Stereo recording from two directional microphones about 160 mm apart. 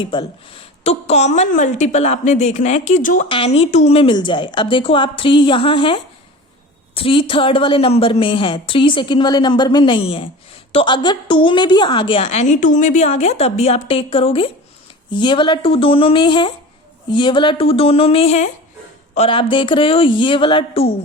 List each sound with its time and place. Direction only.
0.0 s a woman's voice: 30° left (ahead or behind); by 3.2 s 55° left (ahead or behind)
3.2 s a woman's voice: 35° left (ahead or behind)